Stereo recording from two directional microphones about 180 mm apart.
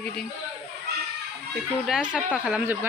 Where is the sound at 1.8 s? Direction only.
5° right (ahead or behind).